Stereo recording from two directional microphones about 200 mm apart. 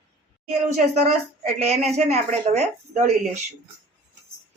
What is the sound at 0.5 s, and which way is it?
Speech, 35° right (ahead or behind).